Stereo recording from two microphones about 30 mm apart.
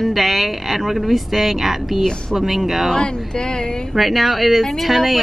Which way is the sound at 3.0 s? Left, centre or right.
Left.